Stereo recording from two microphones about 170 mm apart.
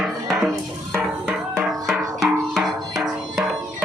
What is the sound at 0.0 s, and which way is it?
Music, centre (ahead or behind).